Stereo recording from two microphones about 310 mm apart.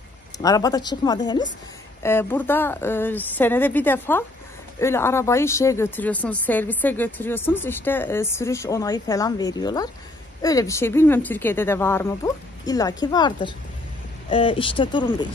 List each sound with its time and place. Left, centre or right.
0.4 s speech: centre